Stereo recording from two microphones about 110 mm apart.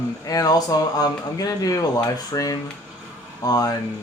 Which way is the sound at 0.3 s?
35° left (ahead or behind).